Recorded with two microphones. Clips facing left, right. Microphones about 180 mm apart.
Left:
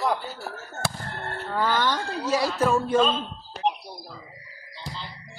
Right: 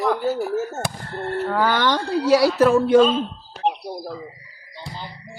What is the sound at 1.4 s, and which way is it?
Speech, 65° right (ahead or behind).